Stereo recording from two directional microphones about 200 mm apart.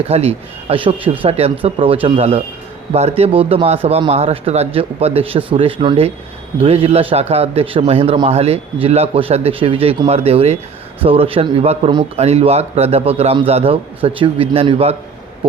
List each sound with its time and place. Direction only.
0.1 s a man's voice: 30° right (ahead or behind)